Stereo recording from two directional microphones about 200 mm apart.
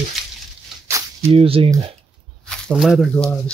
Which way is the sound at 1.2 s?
30° right (ahead or behind).